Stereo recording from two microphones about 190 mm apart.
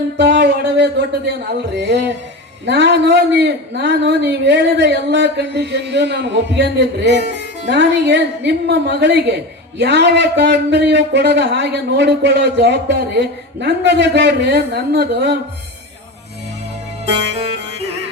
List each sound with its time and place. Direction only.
0.2 s speech: 60° right (ahead or behind)